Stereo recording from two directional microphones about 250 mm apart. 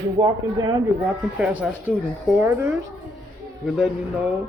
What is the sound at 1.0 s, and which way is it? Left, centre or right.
A woman's voice, centre.